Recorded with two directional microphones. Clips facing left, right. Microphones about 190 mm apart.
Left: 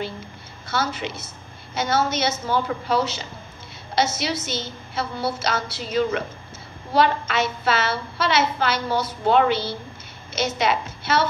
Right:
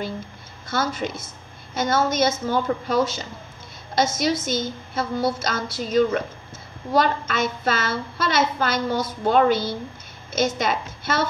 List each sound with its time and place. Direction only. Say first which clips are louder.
0.7 s a woman's voice: right 1 dB; 45° right (ahead or behind)